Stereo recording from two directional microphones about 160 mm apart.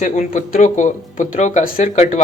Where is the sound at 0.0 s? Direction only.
50° left (ahead or behind).